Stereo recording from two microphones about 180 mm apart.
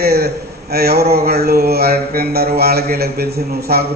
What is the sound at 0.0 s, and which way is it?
A man's voice, 60° right (ahead or behind).